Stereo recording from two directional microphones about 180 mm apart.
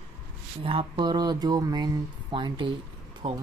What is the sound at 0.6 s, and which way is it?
Speech, 30° right (ahead or behind).